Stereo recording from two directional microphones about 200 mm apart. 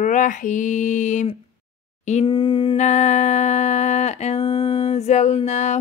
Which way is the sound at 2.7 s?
35° left (ahead or behind).